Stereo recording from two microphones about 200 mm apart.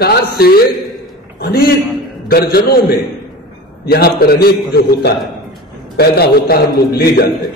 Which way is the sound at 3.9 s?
50° left (ahead or behind).